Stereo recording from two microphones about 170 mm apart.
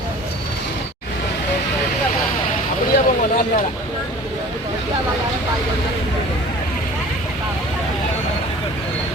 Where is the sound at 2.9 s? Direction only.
60° left (ahead or behind).